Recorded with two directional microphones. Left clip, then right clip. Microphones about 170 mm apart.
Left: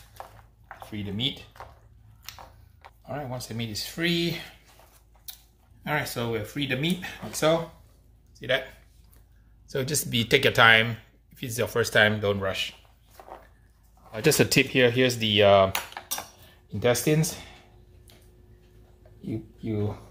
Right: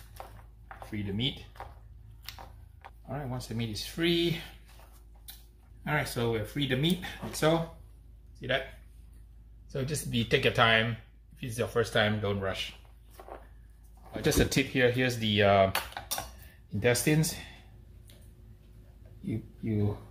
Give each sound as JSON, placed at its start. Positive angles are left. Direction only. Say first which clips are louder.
{"t": 0.8, "sound": "speech", "louder": "left 4 dB", "side_deg": 35}
{"t": 2.3, "sound": "a sound", "louder": "left 2 dB", "side_deg": 0}
{"t": 3.1, "sound": "speech", "louder": "left 5 dB", "side_deg": 35}
{"t": 5.9, "sound": "speech", "louder": "left 2 dB", "side_deg": 30}
{"t": 8.4, "sound": "speech", "louder": "left 5 dB", "side_deg": 40}
{"t": 9.7, "sound": "speech", "louder": "left 7 dB", "side_deg": 70}
{"t": 14.1, "sound": "speech", "louder": "left 6 dB", "side_deg": 55}
{"t": 16.8, "sound": "speech", "louder": "left 4 dB", "side_deg": 30}